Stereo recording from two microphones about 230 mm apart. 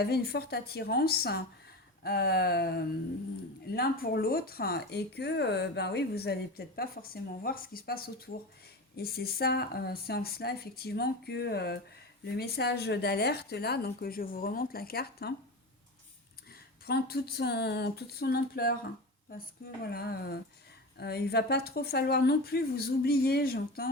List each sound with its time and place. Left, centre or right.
0.0 s speech: left
16.8 s speech: left
19.9 s speech: left